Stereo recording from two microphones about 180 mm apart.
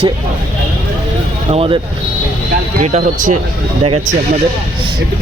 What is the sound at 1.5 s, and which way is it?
Speech, 30° right (ahead or behind).